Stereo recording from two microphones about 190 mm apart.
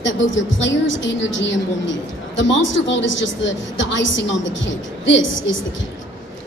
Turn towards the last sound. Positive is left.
turn(degrees=75)  # may be behind; listen again after turning